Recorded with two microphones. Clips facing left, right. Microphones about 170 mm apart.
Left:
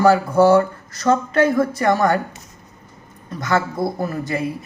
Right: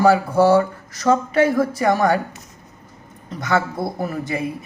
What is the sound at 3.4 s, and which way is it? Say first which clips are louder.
Speech: left 1 dB; 10° right (ahead or behind).